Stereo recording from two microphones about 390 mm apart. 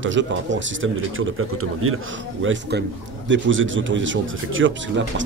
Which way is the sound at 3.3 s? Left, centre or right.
Right.